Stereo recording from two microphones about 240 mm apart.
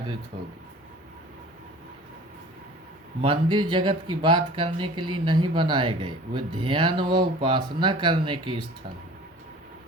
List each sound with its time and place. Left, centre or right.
3.2 s speech: centre